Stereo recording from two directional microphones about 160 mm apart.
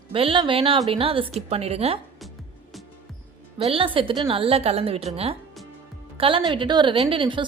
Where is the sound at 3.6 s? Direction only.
35° right (ahead or behind).